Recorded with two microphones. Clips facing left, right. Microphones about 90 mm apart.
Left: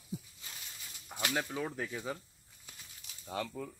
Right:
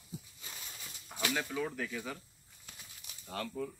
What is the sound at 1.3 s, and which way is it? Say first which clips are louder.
Speech: left 2 dB; 30° left (ahead or behind).